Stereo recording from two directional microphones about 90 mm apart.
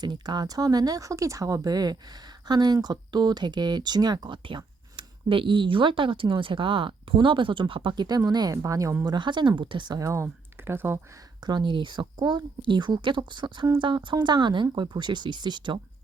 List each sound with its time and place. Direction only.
0.0 s a woman's voice: 50° right (ahead or behind); by 9.0 s 35° right (ahead or behind)
9.0 s speech: 60° right (ahead or behind)
10.0 s speech: 35° right (ahead or behind)
11.4 s speech: 60° right (ahead or behind)